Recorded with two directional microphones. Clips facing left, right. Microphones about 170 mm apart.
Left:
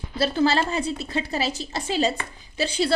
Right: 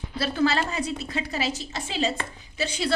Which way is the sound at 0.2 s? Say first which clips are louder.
Left 3 dB; 30° left (ahead or behind).